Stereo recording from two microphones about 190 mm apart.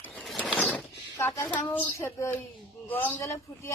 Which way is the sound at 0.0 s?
5° left (ahead or behind).